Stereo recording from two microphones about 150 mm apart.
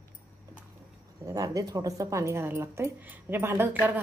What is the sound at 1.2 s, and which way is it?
Speech, 25° right (ahead or behind).